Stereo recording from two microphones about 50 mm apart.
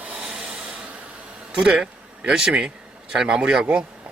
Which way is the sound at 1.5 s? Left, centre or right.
Centre.